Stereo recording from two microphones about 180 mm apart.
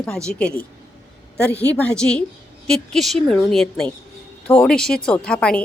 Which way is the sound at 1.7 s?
5° left (ahead or behind).